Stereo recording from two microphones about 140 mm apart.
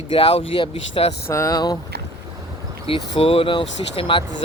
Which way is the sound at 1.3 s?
20° left (ahead or behind).